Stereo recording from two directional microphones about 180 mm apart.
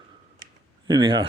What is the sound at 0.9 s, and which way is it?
Speech, 25° right (ahead or behind).